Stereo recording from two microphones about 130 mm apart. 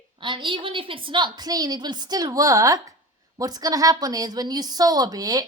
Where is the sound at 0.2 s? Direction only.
40° right (ahead or behind).